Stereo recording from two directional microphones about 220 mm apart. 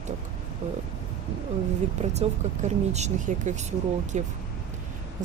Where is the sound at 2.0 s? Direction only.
30° right (ahead or behind).